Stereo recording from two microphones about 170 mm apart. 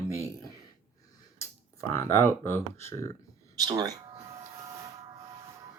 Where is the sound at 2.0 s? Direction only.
15° left (ahead or behind).